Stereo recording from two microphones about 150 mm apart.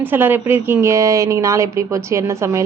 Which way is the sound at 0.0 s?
15° right (ahead or behind).